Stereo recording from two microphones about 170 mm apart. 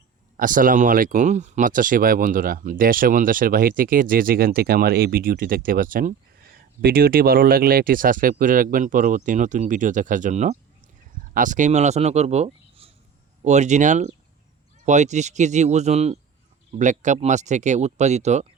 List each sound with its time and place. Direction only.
0.3 s a man's voice: 50° right (ahead or behind)